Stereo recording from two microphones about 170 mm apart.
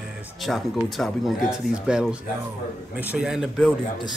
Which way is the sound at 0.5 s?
Centre (ahead or behind).